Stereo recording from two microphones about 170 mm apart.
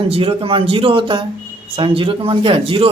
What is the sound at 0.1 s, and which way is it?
Speech, 30° right (ahead or behind).